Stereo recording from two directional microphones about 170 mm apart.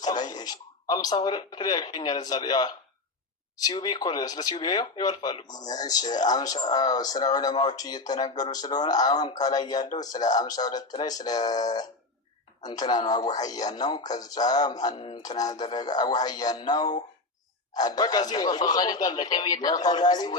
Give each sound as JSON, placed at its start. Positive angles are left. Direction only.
{"t": 0.0, "sound": "speech", "side_deg": 25}